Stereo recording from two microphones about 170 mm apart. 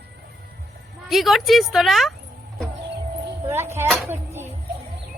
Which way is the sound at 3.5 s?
15° right (ahead or behind).